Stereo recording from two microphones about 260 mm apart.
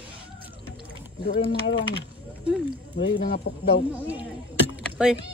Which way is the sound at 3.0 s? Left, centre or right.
Left.